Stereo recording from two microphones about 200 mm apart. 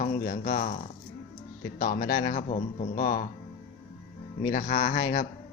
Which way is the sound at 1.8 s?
45° left (ahead or behind).